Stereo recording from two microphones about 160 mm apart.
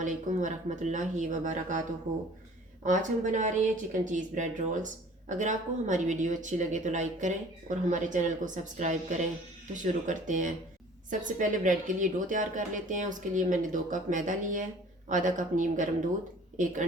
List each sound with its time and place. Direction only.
0.0 s speech: 50° right (ahead or behind)
2.8 s speech: 50° right (ahead or behind)